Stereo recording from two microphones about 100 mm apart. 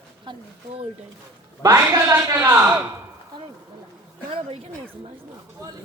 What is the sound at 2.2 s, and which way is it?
Speech, 25° right (ahead or behind).